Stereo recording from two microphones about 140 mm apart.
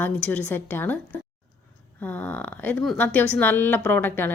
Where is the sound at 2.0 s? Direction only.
10° left (ahead or behind).